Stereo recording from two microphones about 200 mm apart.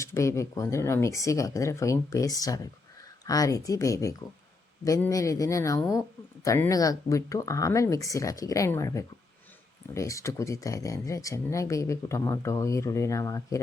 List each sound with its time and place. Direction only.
0.0 s speech: 15° left (ahead or behind)